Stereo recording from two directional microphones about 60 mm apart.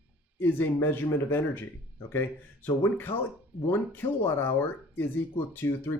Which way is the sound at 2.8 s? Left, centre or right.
Left.